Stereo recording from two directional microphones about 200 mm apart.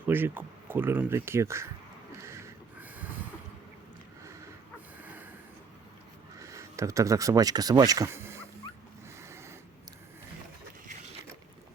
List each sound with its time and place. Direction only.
0.1 s speech: 10° right (ahead or behind)
2.2 s snort: 15° right (ahead or behind)
4.9 s snort: 10° right (ahead or behind)
6.4 s speech: 15° right (ahead or behind)
9.2 s a sound: 15° right (ahead or behind)